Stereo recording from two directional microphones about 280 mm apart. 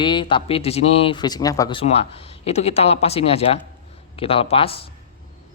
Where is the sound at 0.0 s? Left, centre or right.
Centre.